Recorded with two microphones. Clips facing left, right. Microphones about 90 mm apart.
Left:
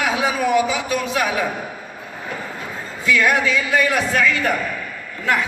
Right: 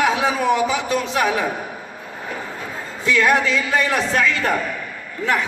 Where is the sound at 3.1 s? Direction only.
25° right (ahead or behind).